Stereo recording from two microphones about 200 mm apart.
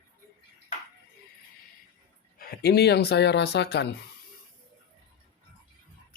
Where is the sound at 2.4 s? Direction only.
50° left (ahead or behind).